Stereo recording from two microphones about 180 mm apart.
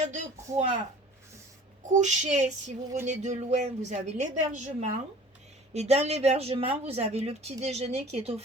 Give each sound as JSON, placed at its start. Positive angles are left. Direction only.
{"t": 0.0, "sound": "a woman's voice", "side_deg": -40}
{"t": 1.9, "sound": "a woman's voice", "side_deg": -40}